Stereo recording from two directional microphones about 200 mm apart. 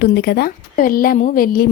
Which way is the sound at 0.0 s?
55° left (ahead or behind).